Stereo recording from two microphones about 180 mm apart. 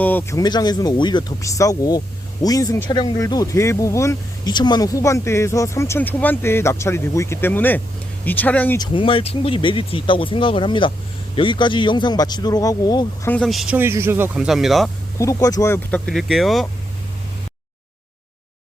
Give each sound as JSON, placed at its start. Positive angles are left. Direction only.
{"t": 0.0, "sound": "speech", "side_deg": 10}
{"t": 8.8, "sound": "speech", "side_deg": 30}
{"t": 13.3, "sound": "speech", "side_deg": 0}
{"t": 15.2, "sound": "speech", "side_deg": 15}